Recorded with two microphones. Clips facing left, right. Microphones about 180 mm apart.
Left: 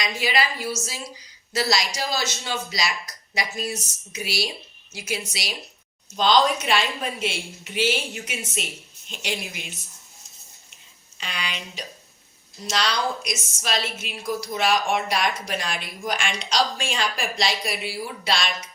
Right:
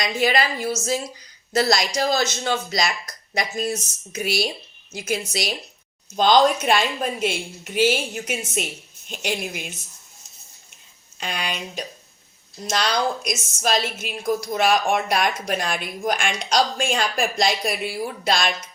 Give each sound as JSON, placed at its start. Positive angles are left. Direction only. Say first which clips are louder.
{"t": 0.2, "sound": "a woman's voice", "louder": "right 4 dB", "side_deg": -50}
{"t": 11.2, "sound": "a woman's voice", "louder": "right 5 dB", "side_deg": -50}